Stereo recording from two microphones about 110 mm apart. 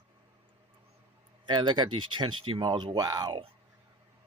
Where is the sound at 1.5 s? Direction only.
45° right (ahead or behind).